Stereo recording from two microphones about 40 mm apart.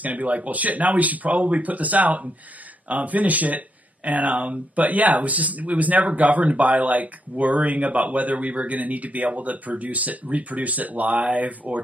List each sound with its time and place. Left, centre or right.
0.0 s speech: right